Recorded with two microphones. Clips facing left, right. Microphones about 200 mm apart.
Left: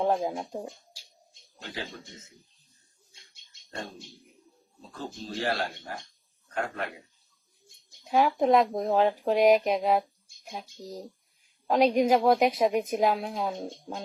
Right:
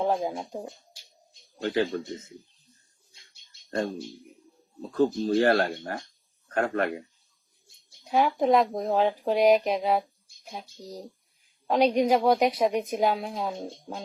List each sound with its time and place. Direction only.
0.0 s speech: centre (ahead or behind)
1.6 s speech: 65° right (ahead or behind)
3.5 s a sound: 35° right (ahead or behind)
4.8 s speech: 55° right (ahead or behind)
8.0 s speech: centre (ahead or behind)